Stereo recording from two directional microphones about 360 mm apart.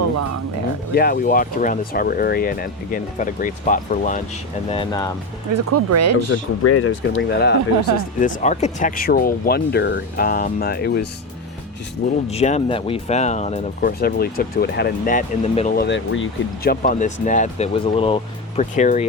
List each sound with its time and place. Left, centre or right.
0.9 s speech: left
5.5 s speech: right
6.6 s speech: left
7.2 s speech: left
12.3 s speech: centre